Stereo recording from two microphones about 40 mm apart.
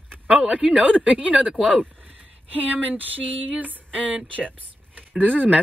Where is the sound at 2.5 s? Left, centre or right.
Right.